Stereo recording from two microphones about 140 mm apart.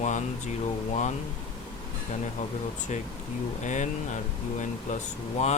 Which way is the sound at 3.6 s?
60° left (ahead or behind).